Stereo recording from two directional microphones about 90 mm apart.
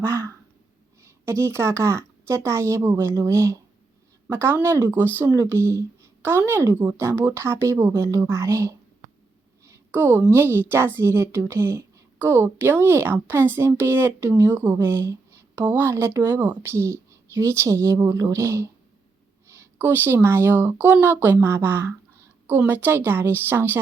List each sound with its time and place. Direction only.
0.0 s a sound: 30° right (ahead or behind)
1.0 s a woman's voice: 35° right (ahead or behind)
9.9 s a woman's voice: 25° right (ahead or behind)